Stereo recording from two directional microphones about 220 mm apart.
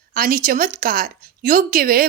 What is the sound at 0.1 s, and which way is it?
Speech, 40° right (ahead or behind).